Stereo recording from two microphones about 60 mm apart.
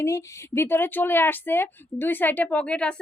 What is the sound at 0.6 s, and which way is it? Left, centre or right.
Speech, left.